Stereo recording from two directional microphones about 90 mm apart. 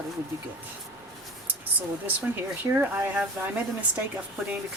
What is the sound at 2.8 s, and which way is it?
Speech, 25° right (ahead or behind).